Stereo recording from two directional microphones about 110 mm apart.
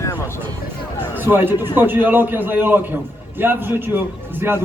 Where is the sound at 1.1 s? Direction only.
20° right (ahead or behind).